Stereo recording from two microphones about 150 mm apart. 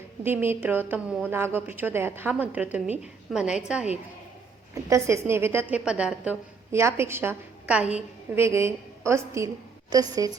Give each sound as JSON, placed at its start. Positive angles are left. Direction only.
{"t": 0.2, "sound": "a woman's voice", "side_deg": -15}
{"t": 4.7, "sound": "a woman's voice", "side_deg": -20}
{"t": 6.7, "sound": "a woman's voice", "side_deg": -20}